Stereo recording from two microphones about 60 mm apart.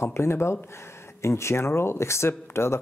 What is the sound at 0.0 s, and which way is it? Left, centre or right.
Speech, left.